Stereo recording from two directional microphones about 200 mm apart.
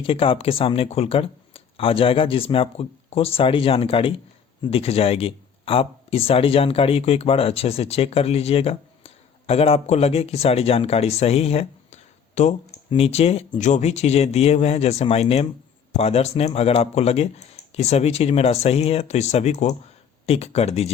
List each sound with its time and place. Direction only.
0.0 s speech: 25° left (ahead or behind)